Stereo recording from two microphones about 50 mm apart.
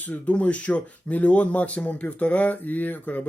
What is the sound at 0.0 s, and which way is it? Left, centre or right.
Speech, left.